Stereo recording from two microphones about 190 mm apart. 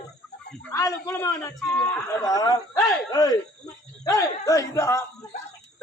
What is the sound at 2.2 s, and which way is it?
Speech, 20° left (ahead or behind).